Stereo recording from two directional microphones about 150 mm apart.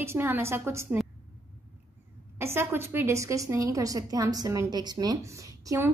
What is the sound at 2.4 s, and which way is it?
A woman's voice, 15° right (ahead or behind).